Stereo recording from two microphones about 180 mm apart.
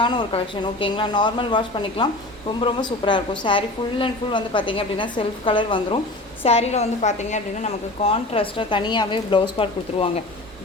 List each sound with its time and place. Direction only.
0.0 s a woman's voice: 30° left (ahead or behind)